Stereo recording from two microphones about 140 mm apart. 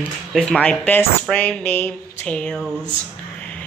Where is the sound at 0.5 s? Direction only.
10° left (ahead or behind).